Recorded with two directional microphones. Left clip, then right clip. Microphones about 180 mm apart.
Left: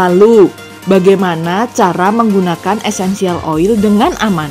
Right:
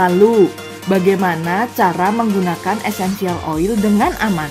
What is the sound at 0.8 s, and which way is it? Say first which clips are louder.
Speech: left 6 dB; 20° left (ahead or behind).